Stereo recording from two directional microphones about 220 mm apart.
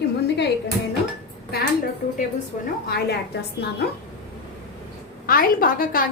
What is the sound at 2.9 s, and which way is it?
Speech, 45° left (ahead or behind).